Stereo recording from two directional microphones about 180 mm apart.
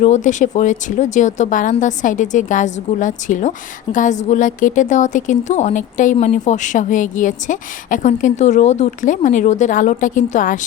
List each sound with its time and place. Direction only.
0.0 s a woman's voice: 40° left (ahead or behind)